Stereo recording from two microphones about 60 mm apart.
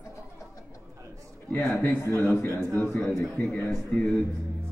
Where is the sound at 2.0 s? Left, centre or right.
Left.